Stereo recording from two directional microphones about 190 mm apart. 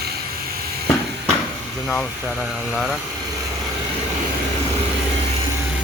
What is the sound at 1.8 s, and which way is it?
Speech, centre (ahead or behind).